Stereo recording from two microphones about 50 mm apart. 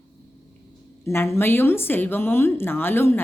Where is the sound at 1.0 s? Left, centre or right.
Left.